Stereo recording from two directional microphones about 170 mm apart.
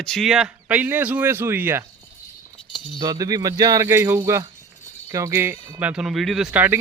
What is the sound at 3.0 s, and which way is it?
Speech, 20° right (ahead or behind).